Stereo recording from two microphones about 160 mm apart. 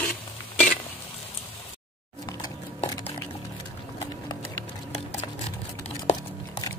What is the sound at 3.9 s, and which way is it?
Clip-clop, 20° left (ahead or behind).